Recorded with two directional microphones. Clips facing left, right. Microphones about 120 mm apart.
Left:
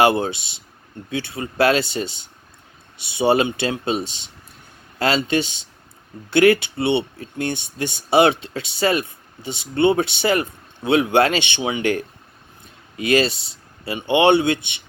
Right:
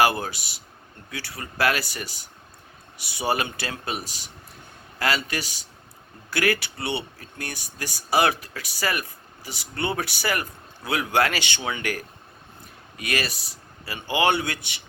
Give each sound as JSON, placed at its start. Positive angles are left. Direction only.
{"t": 0.0, "sound": "speech", "side_deg": 25}